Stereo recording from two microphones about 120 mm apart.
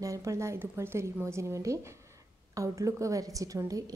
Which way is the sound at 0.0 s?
25° right (ahead or behind).